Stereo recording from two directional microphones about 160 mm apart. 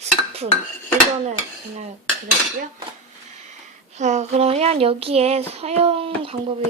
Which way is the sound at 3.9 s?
45° right (ahead or behind).